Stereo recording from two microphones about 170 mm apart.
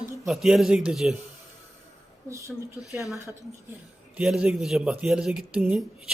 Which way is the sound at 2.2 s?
15° right (ahead or behind).